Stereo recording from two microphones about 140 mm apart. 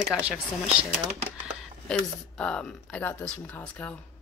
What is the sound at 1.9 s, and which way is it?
Speech, 10° left (ahead or behind).